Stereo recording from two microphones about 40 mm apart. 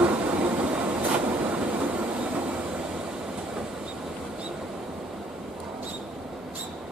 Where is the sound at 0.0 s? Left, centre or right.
Right.